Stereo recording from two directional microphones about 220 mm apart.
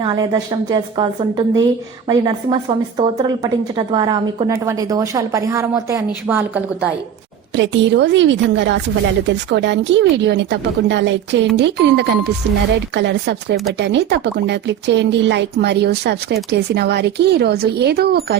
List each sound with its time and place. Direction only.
0.0 s a woman's voice: 15° right (ahead or behind)
7.5 s speech: 55° right (ahead or behind)